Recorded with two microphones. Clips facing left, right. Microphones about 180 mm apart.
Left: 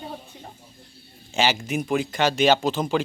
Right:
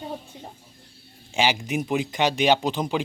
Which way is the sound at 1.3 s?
10° right (ahead or behind).